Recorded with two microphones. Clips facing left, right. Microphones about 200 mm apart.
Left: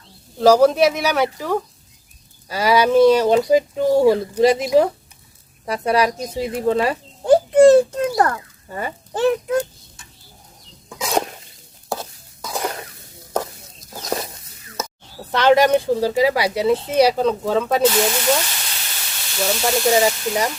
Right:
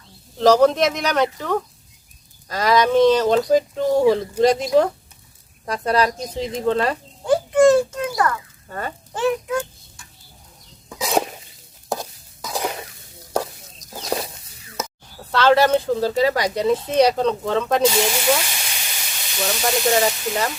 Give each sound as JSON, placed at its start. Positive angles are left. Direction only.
{"t": 0.3, "sound": "speech", "side_deg": 10}
{"t": 7.3, "sound": "a child's voice", "side_deg": 35}
{"t": 8.7, "sound": "speech", "side_deg": 10}
{"t": 9.1, "sound": "a child's voice", "side_deg": 35}
{"t": 10.8, "sound": "a sound", "side_deg": -5}
{"t": 11.9, "sound": "stir", "side_deg": -15}
{"t": 12.5, "sound": "cough", "side_deg": 0}
{"t": 13.3, "sound": "stir", "side_deg": -10}
{"t": 15.3, "sound": "speech", "side_deg": 15}
{"t": 18.0, "sound": "frying", "side_deg": -5}
{"t": 19.4, "sound": "speech", "side_deg": 0}